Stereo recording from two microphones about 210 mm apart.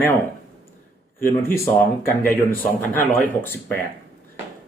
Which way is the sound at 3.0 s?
10° left (ahead or behind).